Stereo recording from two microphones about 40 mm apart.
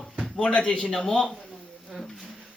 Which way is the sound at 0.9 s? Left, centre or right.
Centre.